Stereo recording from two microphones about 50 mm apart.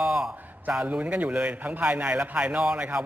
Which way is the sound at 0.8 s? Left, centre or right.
Right.